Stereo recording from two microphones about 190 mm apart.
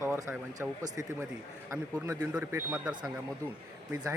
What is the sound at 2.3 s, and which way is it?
Speech, 10° right (ahead or behind).